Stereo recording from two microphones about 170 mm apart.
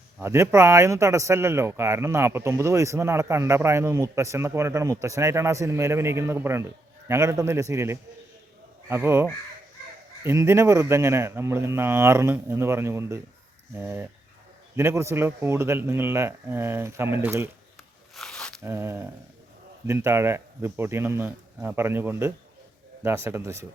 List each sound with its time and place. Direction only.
0.2 s speech: 15° right (ahead or behind)
10.2 s speech: 15° right (ahead or behind)
18.1 s a sound: centre (ahead or behind)
18.6 s speech: 15° right (ahead or behind)